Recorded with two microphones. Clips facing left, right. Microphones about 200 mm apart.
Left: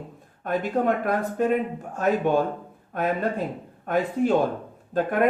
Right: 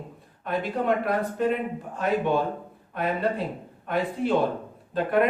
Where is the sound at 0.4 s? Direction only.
45° left (ahead or behind).